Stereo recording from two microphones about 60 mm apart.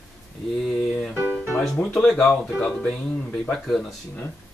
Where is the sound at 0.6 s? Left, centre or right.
Centre.